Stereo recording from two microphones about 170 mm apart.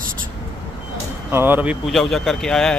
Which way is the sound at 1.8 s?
Centre (ahead or behind).